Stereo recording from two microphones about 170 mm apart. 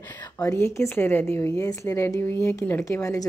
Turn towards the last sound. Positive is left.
turn(degrees=15)  # may be behind; listen again after turning